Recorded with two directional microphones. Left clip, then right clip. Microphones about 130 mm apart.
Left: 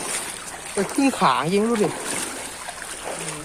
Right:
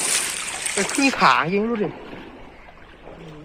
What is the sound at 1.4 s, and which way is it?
Speech, 35° left (ahead or behind).